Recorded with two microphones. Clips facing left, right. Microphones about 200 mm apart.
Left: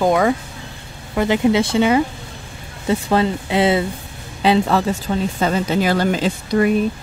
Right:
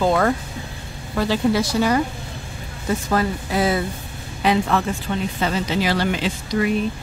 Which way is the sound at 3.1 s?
25° left (ahead or behind).